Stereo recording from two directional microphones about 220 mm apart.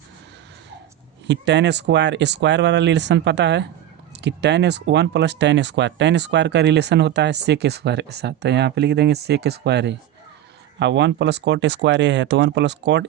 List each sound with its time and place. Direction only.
1.3 s speech: 50° right (ahead or behind)